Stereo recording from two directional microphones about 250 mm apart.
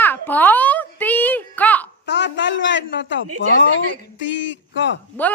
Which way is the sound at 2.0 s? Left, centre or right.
Left.